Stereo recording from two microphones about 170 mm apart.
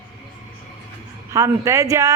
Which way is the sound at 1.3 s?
20° right (ahead or behind).